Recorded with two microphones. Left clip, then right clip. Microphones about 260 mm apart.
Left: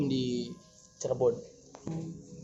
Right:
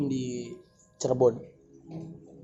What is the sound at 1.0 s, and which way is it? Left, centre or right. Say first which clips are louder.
Speech: right 5 dB; right.